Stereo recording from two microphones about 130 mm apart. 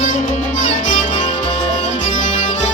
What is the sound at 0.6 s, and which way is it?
Music, 70° left (ahead or behind).